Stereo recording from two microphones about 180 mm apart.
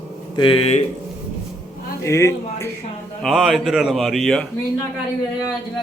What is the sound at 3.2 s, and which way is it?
Speech, centre (ahead or behind).